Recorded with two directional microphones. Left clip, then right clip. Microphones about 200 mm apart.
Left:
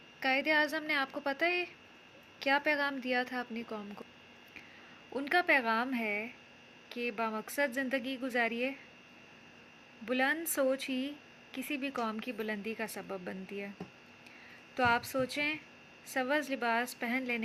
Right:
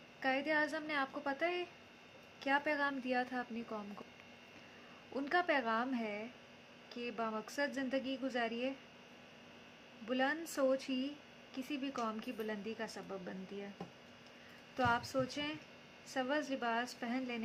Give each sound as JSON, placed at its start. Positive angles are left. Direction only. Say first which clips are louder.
{"t": 0.2, "sound": "a woman's voice", "louder": "left 6 dB", "side_deg": 10}
{"t": 5.1, "sound": "a woman's voice", "louder": "left 6 dB", "side_deg": 10}
{"t": 10.1, "sound": "a woman's voice", "louder": "left 5 dB", "side_deg": 15}
{"t": 14.8, "sound": "a woman's voice", "louder": "left 5 dB", "side_deg": 15}